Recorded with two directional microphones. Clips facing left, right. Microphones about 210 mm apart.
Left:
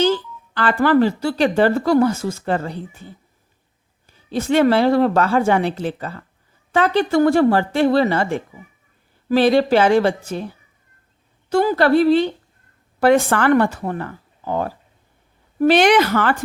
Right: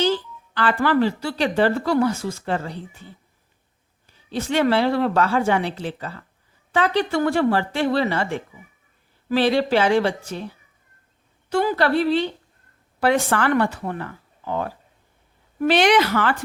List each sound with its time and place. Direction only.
0.0 s speech: 45° left (ahead or behind)
4.3 s speech: 45° left (ahead or behind)